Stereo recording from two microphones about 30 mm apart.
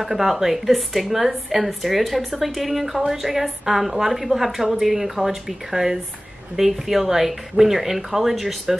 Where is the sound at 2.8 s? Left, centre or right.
Centre.